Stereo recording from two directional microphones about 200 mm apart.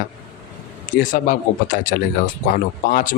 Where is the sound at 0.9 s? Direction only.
45° left (ahead or behind).